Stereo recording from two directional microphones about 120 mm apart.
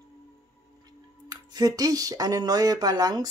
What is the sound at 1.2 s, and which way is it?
Speech, 30° right (ahead or behind).